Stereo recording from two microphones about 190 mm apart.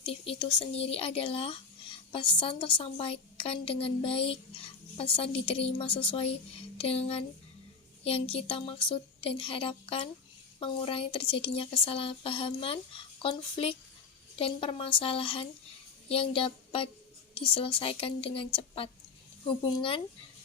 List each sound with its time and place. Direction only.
0.0 s speech: 30° left (ahead or behind)